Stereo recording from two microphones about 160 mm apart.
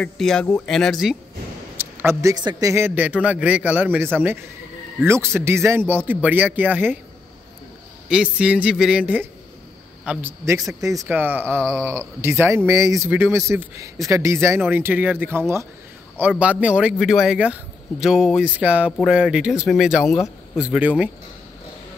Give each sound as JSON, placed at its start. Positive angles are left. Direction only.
{"t": 0.0, "sound": "speech", "side_deg": 5}
{"t": 1.8, "sound": "a sound", "side_deg": -15}
{"t": 2.3, "sound": "a man's voice", "side_deg": -25}
{"t": 8.1, "sound": "a man's voice", "side_deg": -5}